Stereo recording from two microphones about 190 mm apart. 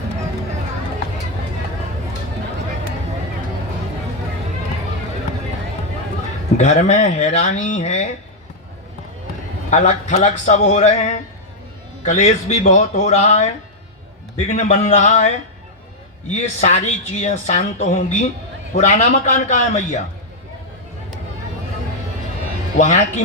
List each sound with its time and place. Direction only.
6.6 s speech: 35° left (ahead or behind)
9.6 s speech: 35° left (ahead or behind)
16.3 s speech: 35° left (ahead or behind)
22.8 s speech: 40° left (ahead or behind)